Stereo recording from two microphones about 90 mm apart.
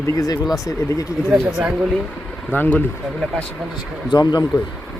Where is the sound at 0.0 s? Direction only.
40° left (ahead or behind).